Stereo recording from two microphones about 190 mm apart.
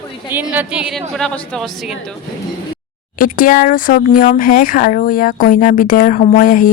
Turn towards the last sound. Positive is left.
turn(degrees=45)  # may be behind; listen again after turning